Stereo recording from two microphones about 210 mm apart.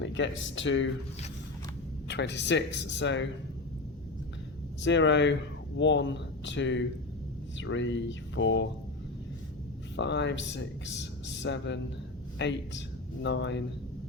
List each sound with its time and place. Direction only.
0.0 s speech: 60° left (ahead or behind)
2.0 s speech: 55° left (ahead or behind)
4.8 s speech: 60° left (ahead or behind)
10.0 s speech: 55° left (ahead or behind)